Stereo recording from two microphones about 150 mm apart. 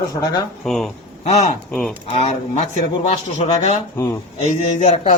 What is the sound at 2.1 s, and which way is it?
Speech, 45° left (ahead or behind).